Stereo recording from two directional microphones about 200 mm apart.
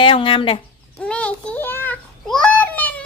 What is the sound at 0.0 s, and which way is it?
Speech, 25° left (ahead or behind).